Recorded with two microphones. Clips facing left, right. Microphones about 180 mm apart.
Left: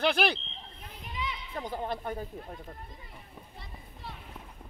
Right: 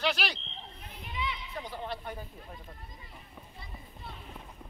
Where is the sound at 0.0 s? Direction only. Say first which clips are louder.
Left 5 dB; 55° left (ahead or behind).